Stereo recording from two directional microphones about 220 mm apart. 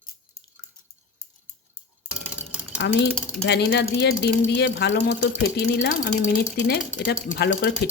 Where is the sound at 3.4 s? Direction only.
50° left (ahead or behind).